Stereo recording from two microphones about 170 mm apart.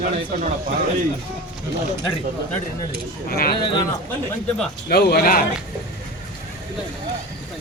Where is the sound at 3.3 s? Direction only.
60° left (ahead or behind).